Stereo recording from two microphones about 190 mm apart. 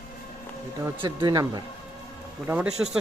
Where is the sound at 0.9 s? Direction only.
20° right (ahead or behind).